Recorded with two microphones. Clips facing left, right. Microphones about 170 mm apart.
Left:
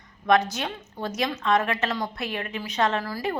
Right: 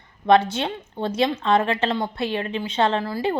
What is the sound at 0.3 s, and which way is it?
A woman's voice, 30° right (ahead or behind).